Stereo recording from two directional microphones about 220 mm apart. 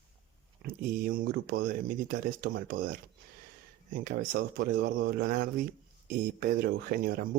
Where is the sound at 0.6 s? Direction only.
40° right (ahead or behind).